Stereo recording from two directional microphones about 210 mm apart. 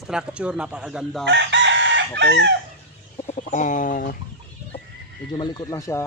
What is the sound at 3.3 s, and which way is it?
Chicken, 35° left (ahead or behind).